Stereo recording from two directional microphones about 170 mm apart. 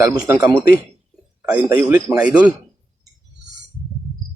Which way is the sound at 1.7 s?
10° right (ahead or behind).